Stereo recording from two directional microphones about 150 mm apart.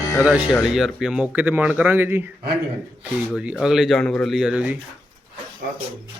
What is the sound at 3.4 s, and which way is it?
Speech, 5° right (ahead or behind).